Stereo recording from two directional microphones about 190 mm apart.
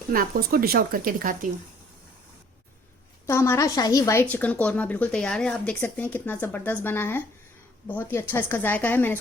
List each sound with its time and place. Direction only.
0.1 s speech: 50° right (ahead or behind)
3.2 s a woman's voice: 15° left (ahead or behind)